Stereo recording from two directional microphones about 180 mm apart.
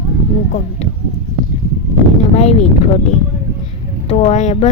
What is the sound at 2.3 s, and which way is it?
Speech, 35° left (ahead or behind).